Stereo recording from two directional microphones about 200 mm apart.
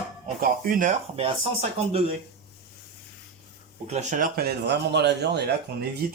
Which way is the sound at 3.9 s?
35° right (ahead or behind).